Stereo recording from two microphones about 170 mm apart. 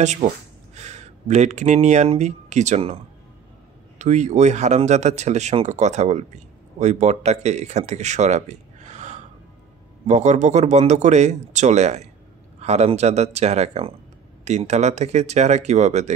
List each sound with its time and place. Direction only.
0.0 s speech: 45° right (ahead or behind)
4.0 s speech: 45° right (ahead or behind)